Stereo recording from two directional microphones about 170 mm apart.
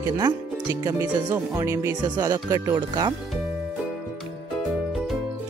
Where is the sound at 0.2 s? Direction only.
20° right (ahead or behind).